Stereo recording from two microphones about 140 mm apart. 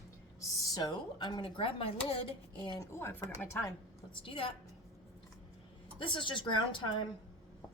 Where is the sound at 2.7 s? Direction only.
20° left (ahead or behind).